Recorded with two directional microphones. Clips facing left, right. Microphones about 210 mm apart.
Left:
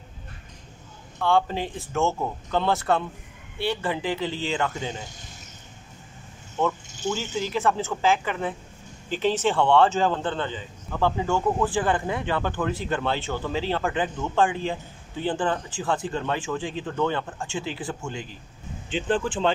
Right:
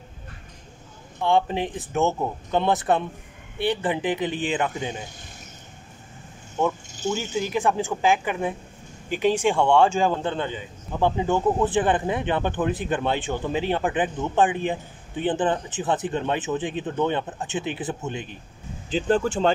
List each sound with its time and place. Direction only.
1.2 s speech: 20° right (ahead or behind)
6.6 s speech: 15° right (ahead or behind)
18.9 s speech: 40° right (ahead or behind)